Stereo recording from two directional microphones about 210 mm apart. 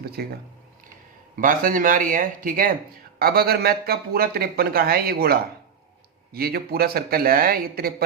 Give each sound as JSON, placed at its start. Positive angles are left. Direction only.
{"t": 0.2, "sound": "speech", "side_deg": -50}
{"t": 1.4, "sound": "speech", "side_deg": -40}